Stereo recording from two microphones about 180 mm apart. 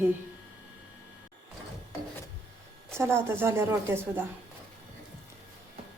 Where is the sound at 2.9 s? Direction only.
15° right (ahead or behind).